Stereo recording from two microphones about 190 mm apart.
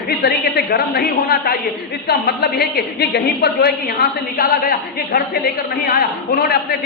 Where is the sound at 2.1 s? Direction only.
55° left (ahead or behind).